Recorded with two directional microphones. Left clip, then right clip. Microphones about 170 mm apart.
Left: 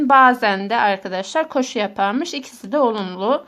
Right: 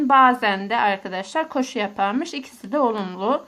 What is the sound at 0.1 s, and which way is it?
A woman's voice, 30° left (ahead or behind).